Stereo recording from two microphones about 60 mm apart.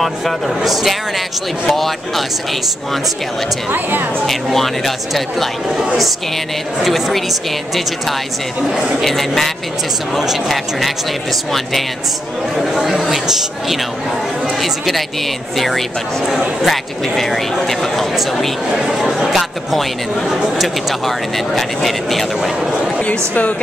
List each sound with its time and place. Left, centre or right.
1.7 s speech: centre
4.3 s speech: centre
8.6 s a man's voice: centre
9.0 s speech: centre
12.5 s speech: centre
22.8 s speech: left